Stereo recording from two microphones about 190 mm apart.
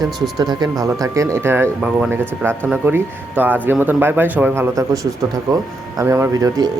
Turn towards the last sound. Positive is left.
turn(degrees=-15)  # may be behind; listen again after turning